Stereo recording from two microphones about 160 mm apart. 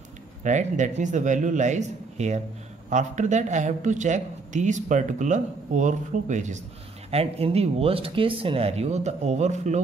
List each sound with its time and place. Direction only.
0.4 s speech: 50° right (ahead or behind)
7.1 s speech: 40° right (ahead or behind)